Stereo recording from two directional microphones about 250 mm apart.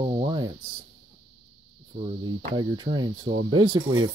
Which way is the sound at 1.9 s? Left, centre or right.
Right.